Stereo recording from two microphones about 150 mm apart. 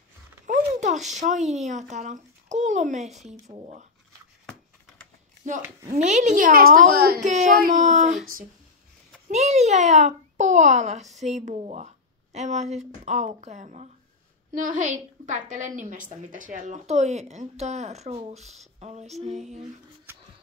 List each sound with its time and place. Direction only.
0.5 s a sound: 50° right (ahead or behind)
1.2 s a child's voice: 50° right (ahead or behind)
5.6 s speech: 20° right (ahead or behind)
5.9 s a woman's voice: 55° right (ahead or behind); by 6.8 s 70° right (ahead or behind)
6.9 s a woman's voice: 90° right
7.2 s a woman's voice: 50° right (ahead or behind)
9.3 s a child's voice: 50° right (ahead or behind)